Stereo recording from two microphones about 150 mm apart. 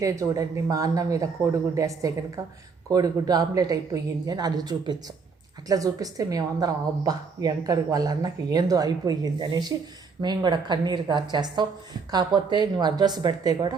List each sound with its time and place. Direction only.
0.0 s a woman's voice: 20° right (ahead or behind)